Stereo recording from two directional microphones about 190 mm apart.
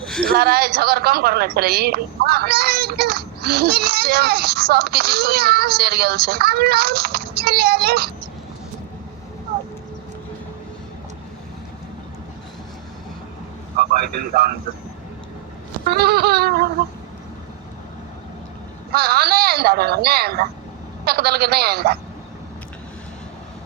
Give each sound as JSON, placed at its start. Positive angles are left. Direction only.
{"t": 0.0, "sound": "a sound", "side_deg": 0}
{"t": 0.3, "sound": "a woman's voice", "side_deg": -55}
{"t": 13.7, "sound": "a man's voice", "side_deg": -50}
{"t": 15.8, "sound": "a woman's voice", "side_deg": -55}
{"t": 18.9, "sound": "a woman's voice", "side_deg": -55}